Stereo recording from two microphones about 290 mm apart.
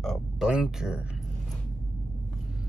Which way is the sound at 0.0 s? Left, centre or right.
Centre.